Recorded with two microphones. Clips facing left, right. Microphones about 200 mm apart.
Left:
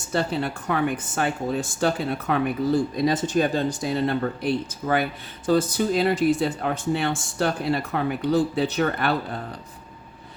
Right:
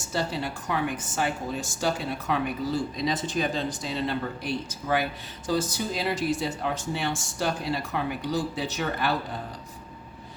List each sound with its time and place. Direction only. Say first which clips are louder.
0.0 s speech: left 5 dB; 60° left (ahead or behind)